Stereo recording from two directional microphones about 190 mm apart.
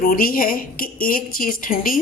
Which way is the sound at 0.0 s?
50° left (ahead or behind).